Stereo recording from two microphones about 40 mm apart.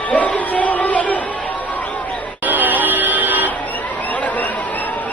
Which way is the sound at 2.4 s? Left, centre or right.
Right.